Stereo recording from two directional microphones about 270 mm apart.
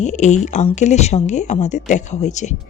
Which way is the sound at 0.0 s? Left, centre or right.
Left.